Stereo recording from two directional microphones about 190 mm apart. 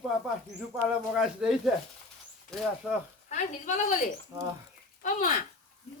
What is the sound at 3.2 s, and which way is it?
Speech, 40° left (ahead or behind).